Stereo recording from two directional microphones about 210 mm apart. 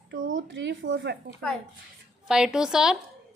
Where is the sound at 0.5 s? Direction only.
60° right (ahead or behind).